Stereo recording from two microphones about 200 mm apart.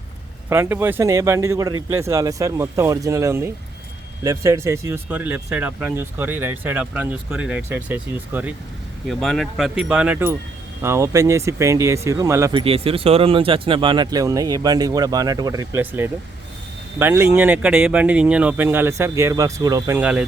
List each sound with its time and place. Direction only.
0.5 s speech: 10° right (ahead or behind)
12.5 s speech: 30° right (ahead or behind)
20.0 s speech: 5° right (ahead or behind)